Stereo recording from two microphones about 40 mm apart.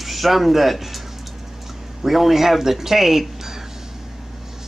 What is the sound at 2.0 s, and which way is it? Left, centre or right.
Speech, centre.